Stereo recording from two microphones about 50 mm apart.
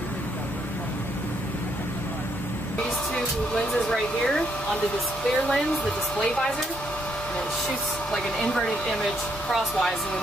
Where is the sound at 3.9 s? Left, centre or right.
Centre.